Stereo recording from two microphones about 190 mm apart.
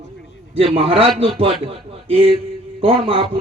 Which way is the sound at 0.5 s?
30° right (ahead or behind).